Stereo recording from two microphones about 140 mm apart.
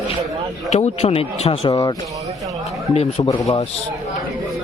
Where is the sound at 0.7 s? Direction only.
50° left (ahead or behind).